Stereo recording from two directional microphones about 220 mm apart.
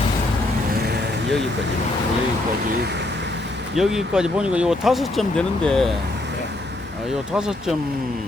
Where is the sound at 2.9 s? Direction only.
50° right (ahead or behind).